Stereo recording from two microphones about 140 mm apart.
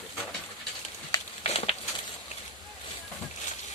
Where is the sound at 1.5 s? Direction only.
45° left (ahead or behind).